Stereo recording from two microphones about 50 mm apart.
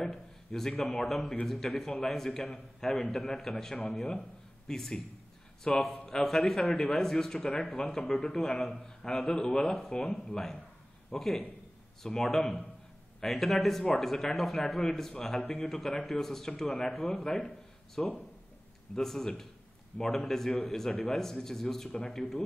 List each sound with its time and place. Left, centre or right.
0.0 s a man's voice: centre
19.9 s speech: centre
20.2 s a man's voice: centre